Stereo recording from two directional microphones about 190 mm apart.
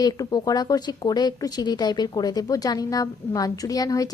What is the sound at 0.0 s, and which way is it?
Speech, 20° left (ahead or behind).